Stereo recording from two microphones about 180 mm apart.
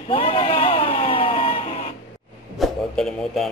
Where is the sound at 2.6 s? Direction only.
Centre (ahead or behind).